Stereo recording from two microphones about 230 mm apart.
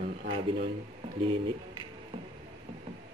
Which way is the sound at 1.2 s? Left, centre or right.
Right.